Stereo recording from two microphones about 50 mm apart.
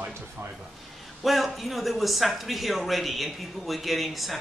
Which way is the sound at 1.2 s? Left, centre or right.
Centre.